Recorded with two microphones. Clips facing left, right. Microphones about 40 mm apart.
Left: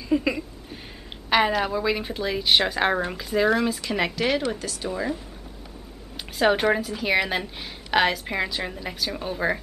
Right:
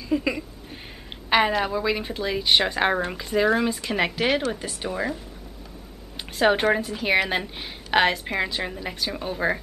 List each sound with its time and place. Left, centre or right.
0.1 s a sound: centre
1.3 s a woman's voice: centre; by 5.0 s right
6.3 s a woman's voice: centre